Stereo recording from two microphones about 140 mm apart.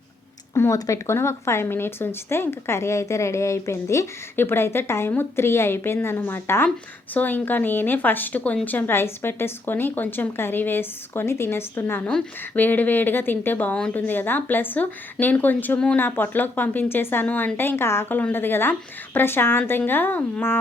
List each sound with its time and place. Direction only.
0.5 s speech: 20° left (ahead or behind)